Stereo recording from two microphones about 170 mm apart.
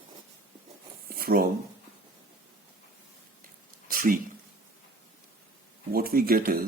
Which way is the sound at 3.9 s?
55° right (ahead or behind).